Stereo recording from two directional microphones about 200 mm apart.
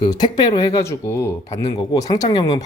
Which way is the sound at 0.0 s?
20° left (ahead or behind).